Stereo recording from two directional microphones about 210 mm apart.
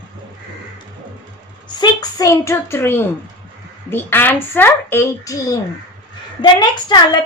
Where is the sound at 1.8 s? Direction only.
20° left (ahead or behind).